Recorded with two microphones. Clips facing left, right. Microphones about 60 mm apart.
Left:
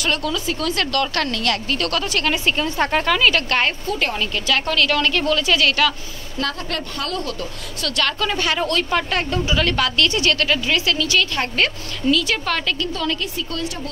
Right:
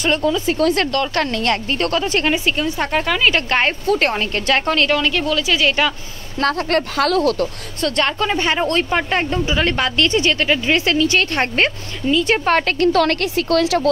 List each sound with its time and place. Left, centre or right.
0.0 s speech: right
0.5 s a woman's voice: right
1.1 s speech: right
2.4 s speech: centre
3.3 s speech: right
3.8 s a woman's voice: right
4.9 s a woman's voice: centre
5.6 s speech: centre
6.4 s a woman's voice: right
7.0 s speech: right
7.8 s speech: right
10.9 s a woman's voice: right
12.3 s a woman's voice: right
12.9 s a woman's voice: right